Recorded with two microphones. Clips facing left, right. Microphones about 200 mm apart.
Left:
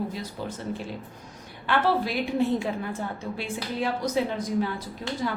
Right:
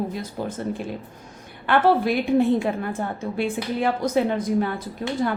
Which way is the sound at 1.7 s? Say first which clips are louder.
Right 6 dB; 55° right (ahead or behind).